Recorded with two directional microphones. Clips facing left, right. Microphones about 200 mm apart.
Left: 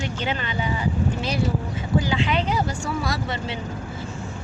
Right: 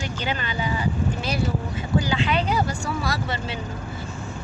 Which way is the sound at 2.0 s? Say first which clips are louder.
Even; 20° left (ahead or behind).